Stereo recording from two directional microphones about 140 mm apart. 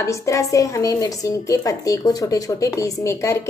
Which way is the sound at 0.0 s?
20° left (ahead or behind).